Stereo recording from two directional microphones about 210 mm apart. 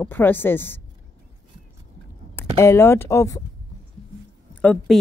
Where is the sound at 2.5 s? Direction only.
15° left (ahead or behind).